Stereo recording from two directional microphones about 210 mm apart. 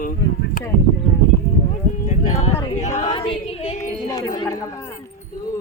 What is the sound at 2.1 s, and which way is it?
Clip-clop, 35° left (ahead or behind).